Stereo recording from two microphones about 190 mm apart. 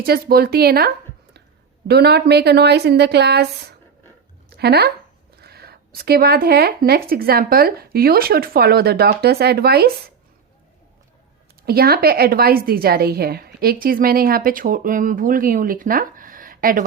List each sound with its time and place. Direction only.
0.0 s speech: 55° right (ahead or behind)
1.9 s speech: 55° right (ahead or behind)
4.4 s a sound: 60° right (ahead or behind)
5.4 s speech: 55° right (ahead or behind)
11.6 s a woman's voice: 55° right (ahead or behind)